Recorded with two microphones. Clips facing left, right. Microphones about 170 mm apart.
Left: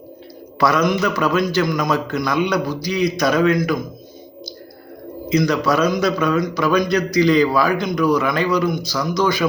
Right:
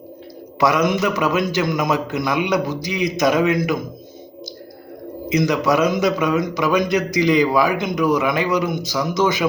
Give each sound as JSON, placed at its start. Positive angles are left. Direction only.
{"t": 0.6, "sound": "a man's voice", "side_deg": -20}
{"t": 5.3, "sound": "a man's voice", "side_deg": -20}